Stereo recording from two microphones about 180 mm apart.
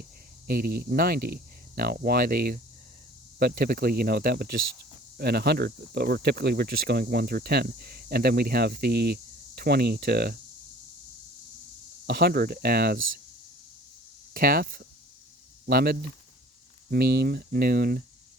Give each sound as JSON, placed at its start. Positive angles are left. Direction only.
{"t": 0.0, "sound": "speech", "side_deg": -55}
{"t": 12.0, "sound": "speech", "side_deg": -60}
{"t": 14.3, "sound": "speech", "side_deg": -55}